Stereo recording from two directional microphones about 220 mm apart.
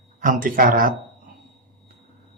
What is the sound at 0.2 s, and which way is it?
Speech, 40° right (ahead or behind).